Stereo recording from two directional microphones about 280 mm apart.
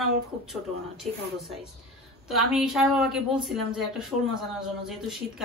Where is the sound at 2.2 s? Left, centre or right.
Centre.